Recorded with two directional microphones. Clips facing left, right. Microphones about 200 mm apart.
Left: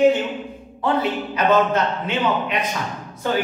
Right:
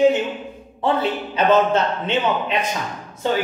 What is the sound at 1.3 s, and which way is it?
Speech, 30° right (ahead or behind).